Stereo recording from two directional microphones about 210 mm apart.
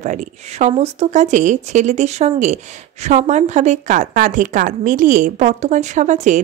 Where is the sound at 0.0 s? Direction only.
35° right (ahead or behind).